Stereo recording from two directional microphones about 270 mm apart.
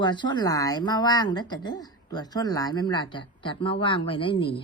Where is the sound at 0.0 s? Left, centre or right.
Centre.